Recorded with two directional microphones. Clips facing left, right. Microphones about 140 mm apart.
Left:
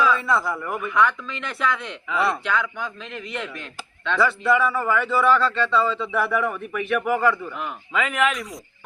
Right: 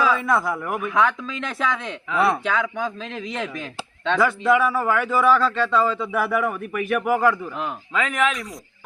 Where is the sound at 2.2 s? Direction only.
25° right (ahead or behind).